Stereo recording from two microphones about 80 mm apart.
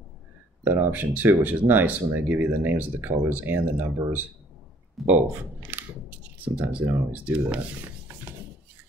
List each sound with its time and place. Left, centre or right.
0.7 s speech: right
6.4 s speech: centre